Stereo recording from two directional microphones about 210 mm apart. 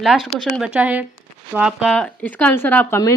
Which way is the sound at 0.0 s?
Centre (ahead or behind).